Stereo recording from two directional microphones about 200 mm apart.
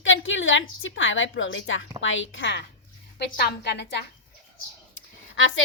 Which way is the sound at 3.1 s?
55° left (ahead or behind).